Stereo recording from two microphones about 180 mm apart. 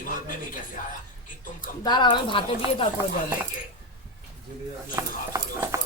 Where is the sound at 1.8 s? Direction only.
25° left (ahead or behind).